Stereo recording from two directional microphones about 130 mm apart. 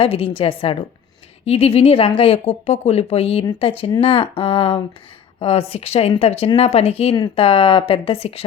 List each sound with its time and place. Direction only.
0.0 s speech: 45° left (ahead or behind)